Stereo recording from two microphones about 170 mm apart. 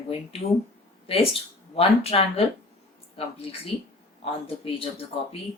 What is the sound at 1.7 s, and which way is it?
Speech, 35° left (ahead or behind).